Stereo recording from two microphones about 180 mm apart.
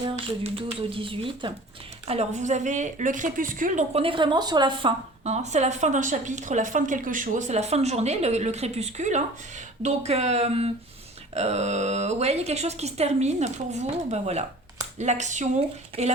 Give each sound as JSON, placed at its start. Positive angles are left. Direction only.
{"t": 0.9, "sound": "a woman's voice", "side_deg": -30}
{"t": 3.9, "sound": "a woman's voice", "side_deg": -30}